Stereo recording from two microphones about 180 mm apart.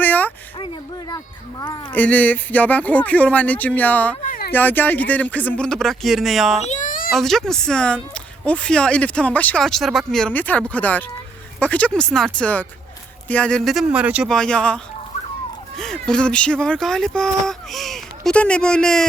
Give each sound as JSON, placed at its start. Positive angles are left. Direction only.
{"t": 0.0, "sound": "a sound", "side_deg": 10}
{"t": 1.1, "sound": "speech", "side_deg": 20}
{"t": 1.9, "sound": "speech", "side_deg": 10}
{"t": 4.2, "sound": "speech", "side_deg": 50}
{"t": 4.5, "sound": "speech", "side_deg": 10}
{"t": 6.7, "sound": "a sound", "side_deg": 45}
{"t": 7.1, "sound": "speech", "side_deg": 0}
{"t": 14.3, "sound": "speech", "side_deg": 5}
{"t": 15.8, "sound": "speech", "side_deg": 5}